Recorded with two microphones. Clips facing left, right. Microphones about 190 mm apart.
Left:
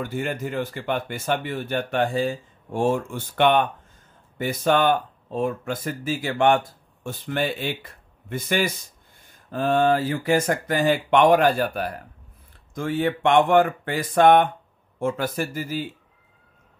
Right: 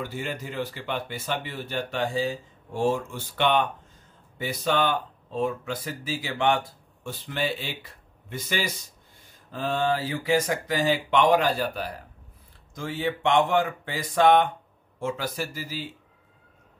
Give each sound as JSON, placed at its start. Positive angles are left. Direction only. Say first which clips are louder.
{"t": 0.0, "sound": "speech", "louder": "left 5 dB", "side_deg": 50}